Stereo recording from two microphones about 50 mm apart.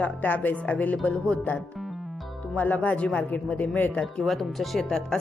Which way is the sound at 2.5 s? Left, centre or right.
Left.